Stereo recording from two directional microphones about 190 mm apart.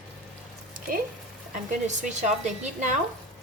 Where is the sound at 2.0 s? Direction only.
40° right (ahead or behind).